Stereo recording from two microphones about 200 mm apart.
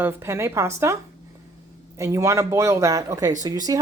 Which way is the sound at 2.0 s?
15° right (ahead or behind).